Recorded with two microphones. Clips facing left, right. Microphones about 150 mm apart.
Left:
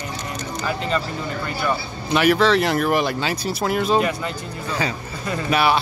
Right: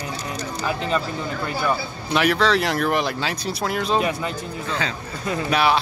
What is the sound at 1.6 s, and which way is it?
Speech, centre (ahead or behind).